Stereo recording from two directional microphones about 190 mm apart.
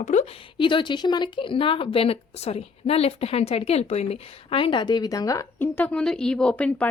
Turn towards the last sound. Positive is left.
turn(degrees=5)  # may be behind; listen again after turning